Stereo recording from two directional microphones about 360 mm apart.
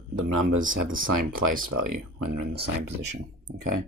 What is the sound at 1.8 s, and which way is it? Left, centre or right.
Speech, right.